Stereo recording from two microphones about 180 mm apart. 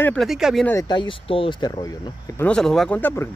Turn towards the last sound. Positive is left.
turn(degrees=10)  # may be behind; listen again after turning